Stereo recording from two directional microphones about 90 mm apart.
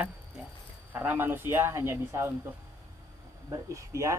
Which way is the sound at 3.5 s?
40° right (ahead or behind).